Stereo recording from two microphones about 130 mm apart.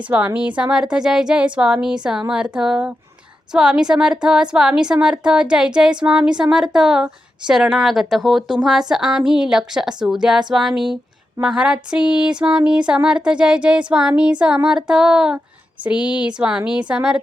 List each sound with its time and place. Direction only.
0.1 s a woman's voice: 10° right (ahead or behind)